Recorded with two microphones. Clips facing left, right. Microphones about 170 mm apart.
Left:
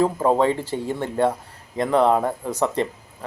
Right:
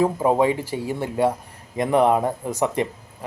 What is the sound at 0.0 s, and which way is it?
Speech, 15° right (ahead or behind).